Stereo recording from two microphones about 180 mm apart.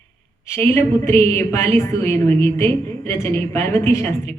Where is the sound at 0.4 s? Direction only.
15° left (ahead or behind).